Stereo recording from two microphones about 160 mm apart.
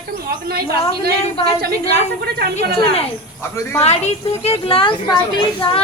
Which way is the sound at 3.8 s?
40° left (ahead or behind).